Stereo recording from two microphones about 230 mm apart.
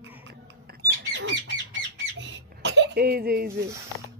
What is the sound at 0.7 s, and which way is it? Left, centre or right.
Rodents, right.